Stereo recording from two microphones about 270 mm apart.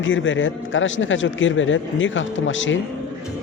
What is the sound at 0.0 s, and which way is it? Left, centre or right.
A man's voice, left.